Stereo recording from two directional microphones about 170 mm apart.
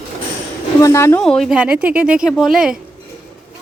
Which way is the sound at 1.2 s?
Centre (ahead or behind).